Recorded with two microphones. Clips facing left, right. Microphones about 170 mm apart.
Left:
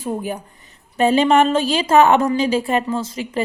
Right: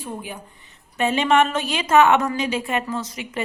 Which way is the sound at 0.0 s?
45° left (ahead or behind).